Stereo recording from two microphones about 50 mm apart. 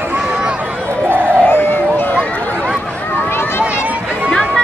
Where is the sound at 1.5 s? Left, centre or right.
Left.